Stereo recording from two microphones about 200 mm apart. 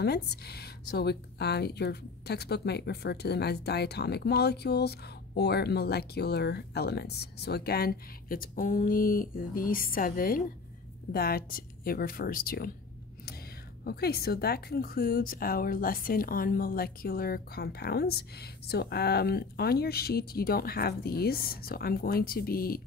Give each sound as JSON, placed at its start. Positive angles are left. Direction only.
{"t": 0.0, "sound": "speech", "side_deg": 55}
{"t": 13.8, "sound": "speech", "side_deg": 50}